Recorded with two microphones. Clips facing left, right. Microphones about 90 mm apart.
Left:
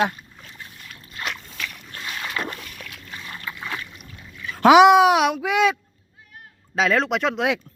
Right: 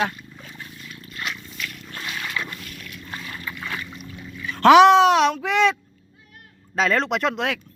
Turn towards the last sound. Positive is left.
turn(degrees=0)  # may be behind; listen again after turning